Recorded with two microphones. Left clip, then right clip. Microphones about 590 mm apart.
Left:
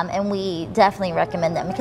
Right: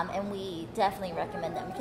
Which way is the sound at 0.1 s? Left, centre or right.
Left.